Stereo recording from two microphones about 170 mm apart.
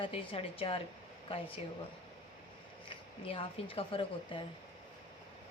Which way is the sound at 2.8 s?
30° left (ahead or behind).